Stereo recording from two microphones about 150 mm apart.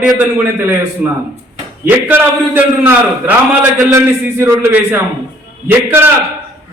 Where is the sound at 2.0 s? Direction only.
10° right (ahead or behind).